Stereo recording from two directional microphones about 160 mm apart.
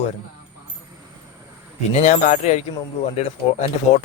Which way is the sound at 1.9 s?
45° left (ahead or behind).